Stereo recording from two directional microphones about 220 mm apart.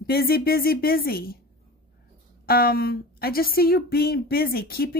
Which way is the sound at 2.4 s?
45° left (ahead or behind).